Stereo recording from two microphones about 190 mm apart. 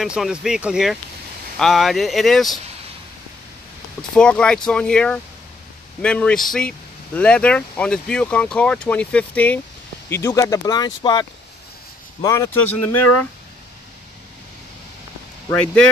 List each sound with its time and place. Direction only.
0.0 s speech: 5° right (ahead or behind)
4.1 s speech: 5° left (ahead or behind)
15.5 s speech: 5° left (ahead or behind)